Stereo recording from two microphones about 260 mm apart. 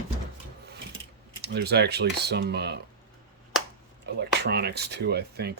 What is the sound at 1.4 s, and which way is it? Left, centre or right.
Speech, right.